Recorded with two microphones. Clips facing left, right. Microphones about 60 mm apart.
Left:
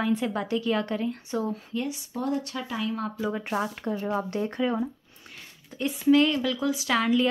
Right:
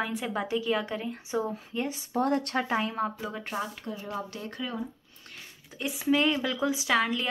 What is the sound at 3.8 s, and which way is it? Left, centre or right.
Speech, left.